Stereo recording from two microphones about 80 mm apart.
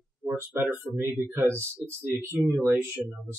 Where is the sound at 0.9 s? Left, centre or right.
Right.